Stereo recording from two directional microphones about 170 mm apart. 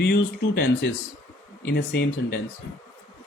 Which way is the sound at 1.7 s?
75° left (ahead or behind).